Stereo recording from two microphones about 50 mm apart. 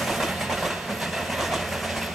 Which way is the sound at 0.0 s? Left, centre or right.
Centre.